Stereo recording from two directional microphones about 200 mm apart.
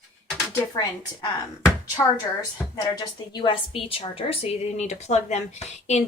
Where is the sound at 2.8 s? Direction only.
20° left (ahead or behind).